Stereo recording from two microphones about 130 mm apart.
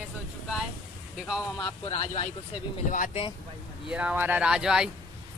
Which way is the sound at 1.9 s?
55° left (ahead or behind).